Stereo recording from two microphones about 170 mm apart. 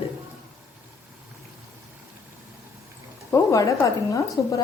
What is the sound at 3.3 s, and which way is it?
Speech, 20° left (ahead or behind).